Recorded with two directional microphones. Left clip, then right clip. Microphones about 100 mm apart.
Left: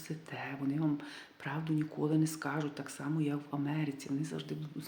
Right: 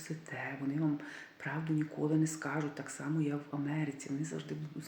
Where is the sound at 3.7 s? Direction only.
35° left (ahead or behind).